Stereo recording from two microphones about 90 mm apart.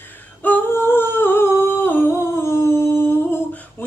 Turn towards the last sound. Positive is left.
turn(degrees=20)  # may be behind; listen again after turning